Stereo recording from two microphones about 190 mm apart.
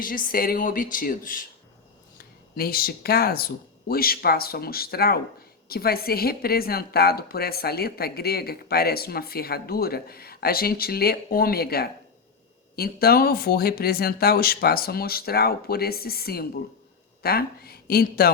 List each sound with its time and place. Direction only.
0.0 s a woman's voice: 50° left (ahead or behind)